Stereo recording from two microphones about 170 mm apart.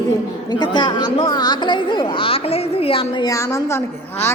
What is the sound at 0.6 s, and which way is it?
A woman's voice, 25° left (ahead or behind).